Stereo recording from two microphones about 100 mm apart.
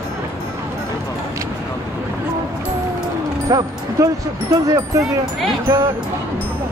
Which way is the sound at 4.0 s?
35° right (ahead or behind).